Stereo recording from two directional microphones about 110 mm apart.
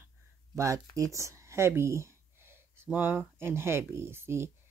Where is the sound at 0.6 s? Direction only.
30° right (ahead or behind).